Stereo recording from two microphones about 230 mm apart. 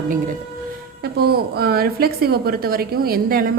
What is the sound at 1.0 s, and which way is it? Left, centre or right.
A woman's voice, right.